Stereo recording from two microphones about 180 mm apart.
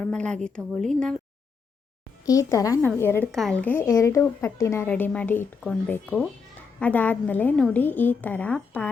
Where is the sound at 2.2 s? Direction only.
20° left (ahead or behind).